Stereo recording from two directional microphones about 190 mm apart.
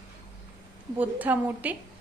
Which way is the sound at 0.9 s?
10° right (ahead or behind).